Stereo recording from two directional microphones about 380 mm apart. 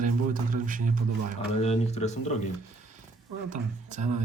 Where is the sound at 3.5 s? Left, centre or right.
Centre.